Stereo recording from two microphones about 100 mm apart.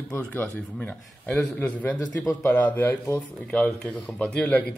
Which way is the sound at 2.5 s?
15° left (ahead or behind).